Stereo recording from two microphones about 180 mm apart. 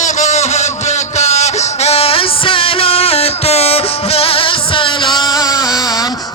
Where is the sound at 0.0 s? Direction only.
40° left (ahead or behind).